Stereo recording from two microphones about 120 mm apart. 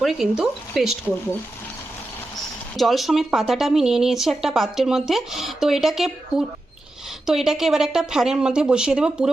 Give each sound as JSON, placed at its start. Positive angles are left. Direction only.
{"t": 0.0, "sound": "a woman's voice", "side_deg": -5}
{"t": 2.7, "sound": "a woman's voice", "side_deg": 0}